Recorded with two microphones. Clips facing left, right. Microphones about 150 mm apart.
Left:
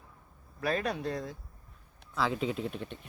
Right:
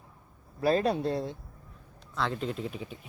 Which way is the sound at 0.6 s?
30° right (ahead or behind).